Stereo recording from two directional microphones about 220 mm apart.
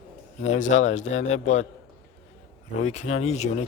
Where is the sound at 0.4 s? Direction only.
35° left (ahead or behind).